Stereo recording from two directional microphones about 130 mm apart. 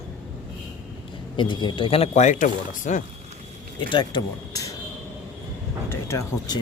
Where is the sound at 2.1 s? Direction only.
70° left (ahead or behind).